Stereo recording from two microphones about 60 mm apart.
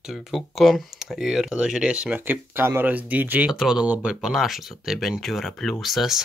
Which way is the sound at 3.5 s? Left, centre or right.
Centre.